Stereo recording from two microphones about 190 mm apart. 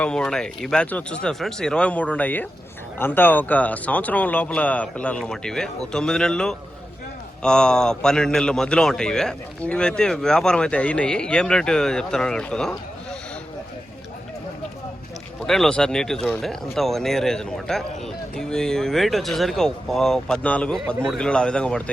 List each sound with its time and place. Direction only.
0.0 s a man's voice: 5° left (ahead or behind)
15.4 s a man's voice: centre (ahead or behind)